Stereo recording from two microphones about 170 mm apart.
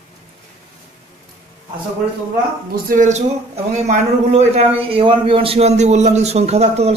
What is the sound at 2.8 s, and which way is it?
A man's voice, 45° right (ahead or behind).